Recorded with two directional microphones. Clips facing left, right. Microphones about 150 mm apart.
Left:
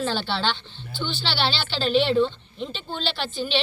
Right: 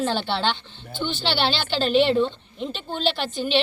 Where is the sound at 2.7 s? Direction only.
50° right (ahead or behind).